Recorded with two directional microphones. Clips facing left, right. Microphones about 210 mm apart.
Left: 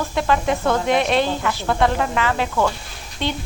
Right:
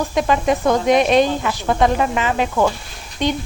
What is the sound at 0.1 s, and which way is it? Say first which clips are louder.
A woman's voice: right 2 dB; 15° right (ahead or behind).